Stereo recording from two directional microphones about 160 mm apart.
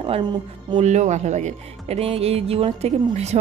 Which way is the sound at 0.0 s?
30° right (ahead or behind).